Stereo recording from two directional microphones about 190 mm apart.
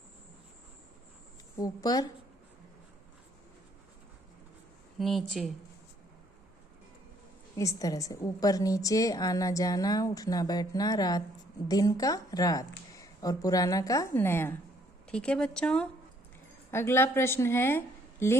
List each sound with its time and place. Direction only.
1.5 s a woman's voice: 20° left (ahead or behind)
4.9 s speech: centre (ahead or behind)
7.5 s a woman's voice: 15° left (ahead or behind)